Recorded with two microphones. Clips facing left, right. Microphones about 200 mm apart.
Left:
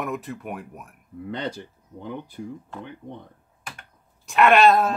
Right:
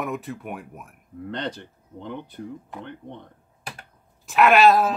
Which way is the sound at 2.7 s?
15° right (ahead or behind).